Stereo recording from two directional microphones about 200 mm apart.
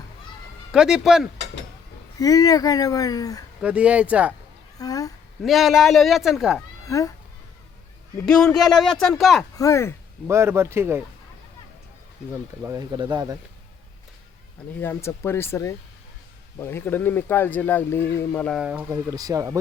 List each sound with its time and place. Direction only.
0.7 s speech: 5° right (ahead or behind)
2.1 s speech: 20° left (ahead or behind)
3.6 s speech: 5° right (ahead or behind)
4.8 s speech: 15° left (ahead or behind)
5.4 s speech: centre (ahead or behind)
6.8 s speech: 15° left (ahead or behind)
8.2 s speech: 5° left (ahead or behind)
9.6 s speech: 15° left (ahead or behind)
10.2 s speech: 15° right (ahead or behind)
12.3 s speech: 15° right (ahead or behind)
14.8 s speech: 10° left (ahead or behind); by 19.5 s 15° right (ahead or behind)